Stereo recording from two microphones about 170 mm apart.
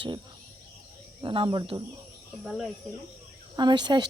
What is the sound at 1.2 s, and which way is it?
Speech, 30° right (ahead or behind).